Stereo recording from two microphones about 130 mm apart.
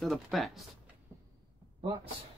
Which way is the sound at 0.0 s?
Centre (ahead or behind).